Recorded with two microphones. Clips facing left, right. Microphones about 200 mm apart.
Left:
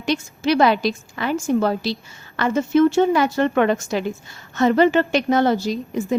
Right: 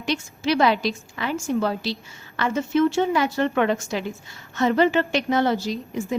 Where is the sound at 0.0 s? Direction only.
45° left (ahead or behind).